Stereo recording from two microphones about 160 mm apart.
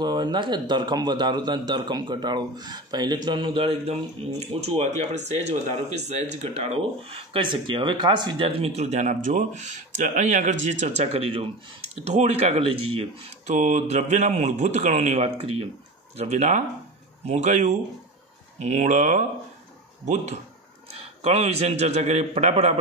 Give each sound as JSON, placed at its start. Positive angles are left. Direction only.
{"t": 0.0, "sound": "a man's voice", "side_deg": -25}
{"t": 13.6, "sound": "speech", "side_deg": -50}
{"t": 20.9, "sound": "speech", "side_deg": -40}